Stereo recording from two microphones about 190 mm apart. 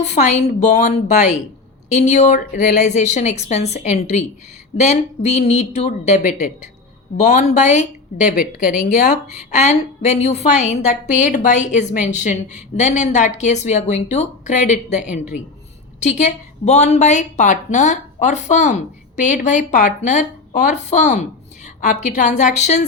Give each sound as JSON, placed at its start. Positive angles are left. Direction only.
{"t": 0.0, "sound": "a woman's voice", "side_deg": 35}
{"t": 9.3, "sound": "a woman's voice", "side_deg": 35}